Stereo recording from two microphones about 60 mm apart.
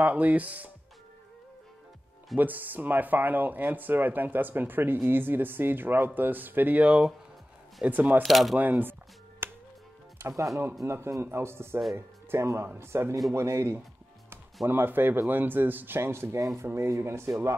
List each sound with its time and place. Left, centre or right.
0.0 s speech: right
2.3 s speech: right
8.2 s speech: centre
8.5 s speech: right
9.4 s music: right
10.2 s a man's voice: right
14.7 s a man's voice: right